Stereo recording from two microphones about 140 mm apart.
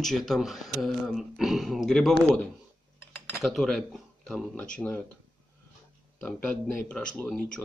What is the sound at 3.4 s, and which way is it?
Speech, centre (ahead or behind).